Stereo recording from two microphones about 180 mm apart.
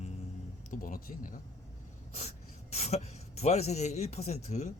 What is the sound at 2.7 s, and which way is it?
A man's voice, 35° left (ahead or behind).